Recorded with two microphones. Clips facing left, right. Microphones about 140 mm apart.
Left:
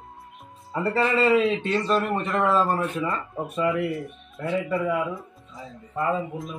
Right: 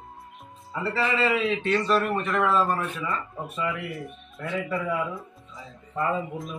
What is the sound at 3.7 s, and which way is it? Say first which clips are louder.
Speech: left 7 dB; centre (ahead or behind).